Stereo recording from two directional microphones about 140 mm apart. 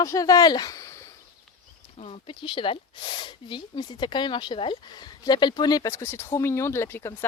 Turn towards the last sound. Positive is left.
turn(degrees=15)  # may be behind; listen again after turning